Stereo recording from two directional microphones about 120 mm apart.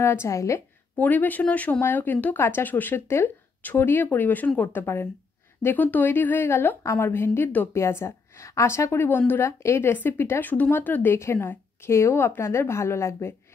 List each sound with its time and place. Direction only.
0.0 s speech: 20° left (ahead or behind)
0.9 s speech: 15° left (ahead or behind)